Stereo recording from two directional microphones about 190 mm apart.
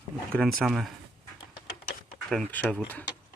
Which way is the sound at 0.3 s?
Centre (ahead or behind).